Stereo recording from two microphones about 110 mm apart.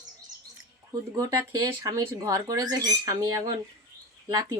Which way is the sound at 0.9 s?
35° right (ahead or behind).